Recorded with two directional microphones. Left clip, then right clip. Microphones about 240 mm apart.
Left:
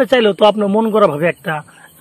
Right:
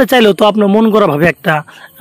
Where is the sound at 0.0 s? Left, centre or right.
Right.